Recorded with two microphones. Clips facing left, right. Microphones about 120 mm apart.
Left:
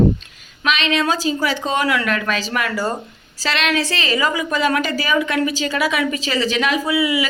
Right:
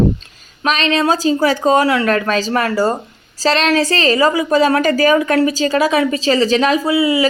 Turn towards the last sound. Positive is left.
turn(degrees=-35)  # may be behind; listen again after turning